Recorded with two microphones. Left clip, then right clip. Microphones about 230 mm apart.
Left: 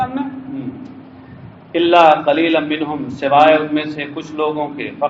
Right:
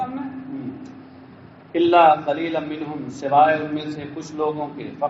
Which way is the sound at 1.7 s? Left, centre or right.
Left.